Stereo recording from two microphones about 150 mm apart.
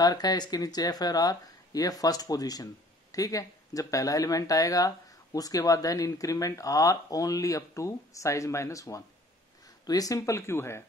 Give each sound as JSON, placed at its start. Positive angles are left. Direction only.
{"t": 0.0, "sound": "speech", "side_deg": 25}